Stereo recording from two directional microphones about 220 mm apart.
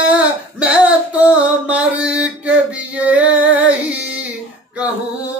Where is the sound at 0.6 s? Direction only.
5° right (ahead or behind).